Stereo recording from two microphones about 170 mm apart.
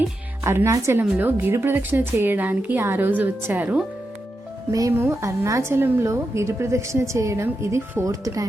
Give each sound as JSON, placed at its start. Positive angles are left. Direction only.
{"t": 0.4, "sound": "a woman's voice", "side_deg": -15}